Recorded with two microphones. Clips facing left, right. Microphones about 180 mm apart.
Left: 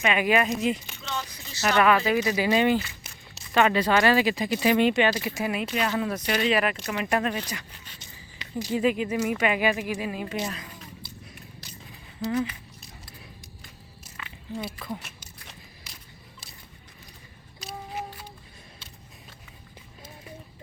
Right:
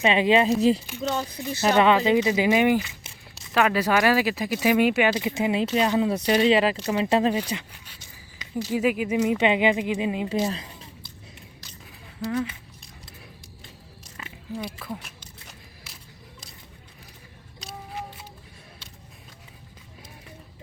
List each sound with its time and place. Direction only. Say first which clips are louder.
0.0 s speech: right 4 dB; 25° right (ahead or behind)
1.7 s speech: right 2 dB; 20° right (ahead or behind)
3.3 s speech: even; 5° right (ahead or behind)
5.1 s speech: right 4 dB; 20° right (ahead or behind)
8.7 s speech: right 1 dB; 10° right (ahead or behind)
9.4 s speech: right 4 dB; 20° right (ahead or behind)
10.2 s speech: right 6 dB; 35° right (ahead or behind)
12.2 s speech: even; centre (ahead or behind)
14.5 s speech: right 1 dB; 5° right (ahead or behind)
15.4 s a sound: even; 5° right (ahead or behind)
17.6 s a sound: left 1 dB; centre (ahead or behind)